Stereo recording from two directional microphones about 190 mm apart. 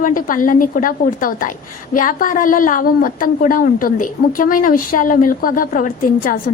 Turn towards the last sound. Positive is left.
turn(degrees=45)  # may be behind; listen again after turning